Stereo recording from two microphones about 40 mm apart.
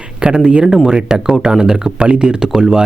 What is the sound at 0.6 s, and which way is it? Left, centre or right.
Speech, centre.